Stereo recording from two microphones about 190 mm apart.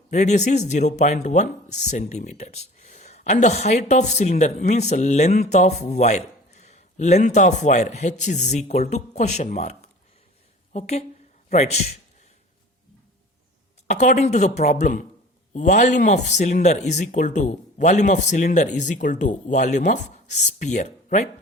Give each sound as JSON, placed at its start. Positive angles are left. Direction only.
{"t": 0.1, "sound": "a woman's voice", "side_deg": 40}
{"t": 13.8, "sound": "speech", "side_deg": 35}